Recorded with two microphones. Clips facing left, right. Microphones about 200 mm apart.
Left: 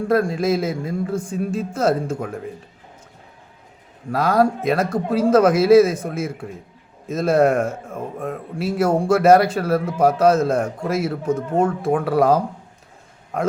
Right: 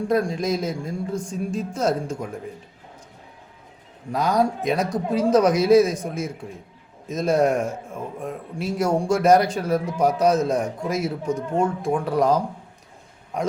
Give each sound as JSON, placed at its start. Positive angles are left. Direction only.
{"t": 0.1, "sound": "a man's voice", "side_deg": 5}
{"t": 4.1, "sound": "a man's voice", "side_deg": 5}
{"t": 11.9, "sound": "speech", "side_deg": 60}
{"t": 12.1, "sound": "speech", "side_deg": 5}